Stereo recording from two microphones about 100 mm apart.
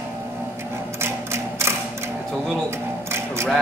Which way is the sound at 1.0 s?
25° right (ahead or behind).